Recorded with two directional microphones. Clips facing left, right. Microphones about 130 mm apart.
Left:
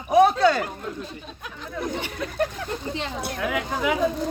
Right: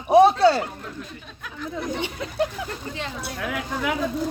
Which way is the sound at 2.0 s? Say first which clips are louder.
Right 2 dB; 20° right (ahead or behind).